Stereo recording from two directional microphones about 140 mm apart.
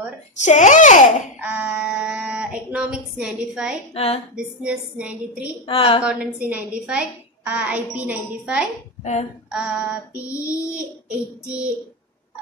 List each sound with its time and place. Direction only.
0.4 s a child's voice: 60° left (ahead or behind)
1.4 s speech: 10° right (ahead or behind)
3.9 s a woman's voice: 45° left (ahead or behind)
4.4 s a woman's voice: 5° right (ahead or behind)
5.7 s a woman's voice: 40° left (ahead or behind)
6.0 s a woman's voice: 10° right (ahead or behind)